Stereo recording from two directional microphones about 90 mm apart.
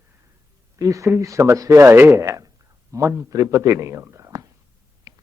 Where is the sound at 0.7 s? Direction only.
40° right (ahead or behind).